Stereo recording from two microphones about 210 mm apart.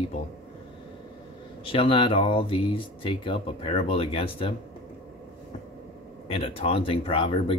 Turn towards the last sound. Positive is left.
turn(degrees=25)  # may be behind; listen again after turning